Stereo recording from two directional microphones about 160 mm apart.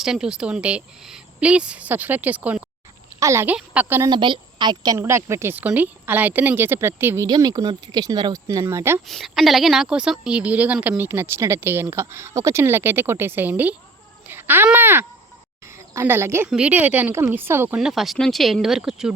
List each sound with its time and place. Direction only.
0.0 s a woman's voice: 5° right (ahead or behind)
4.1 s a woman's voice: 30° right (ahead or behind); by 7.3 s 15° right (ahead or behind)
7.3 s speech: 25° right (ahead or behind)
9.0 s a woman's voice: centre (ahead or behind)
17.7 s speech: centre (ahead or behind)